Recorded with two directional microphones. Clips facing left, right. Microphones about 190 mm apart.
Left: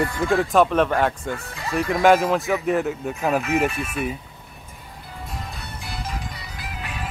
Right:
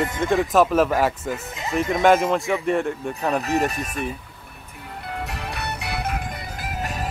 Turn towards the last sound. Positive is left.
turn(degrees=-45)  # may be behind; listen again after turning